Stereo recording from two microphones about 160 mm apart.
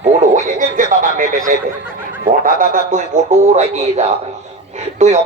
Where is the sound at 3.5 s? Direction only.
45° right (ahead or behind).